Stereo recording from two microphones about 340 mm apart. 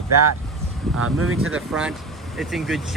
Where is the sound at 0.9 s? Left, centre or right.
Centre.